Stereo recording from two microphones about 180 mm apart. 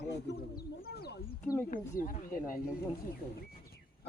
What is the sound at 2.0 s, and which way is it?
Speech, 50° left (ahead or behind).